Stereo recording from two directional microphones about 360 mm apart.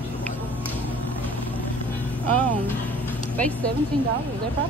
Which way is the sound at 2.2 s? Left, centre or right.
Centre.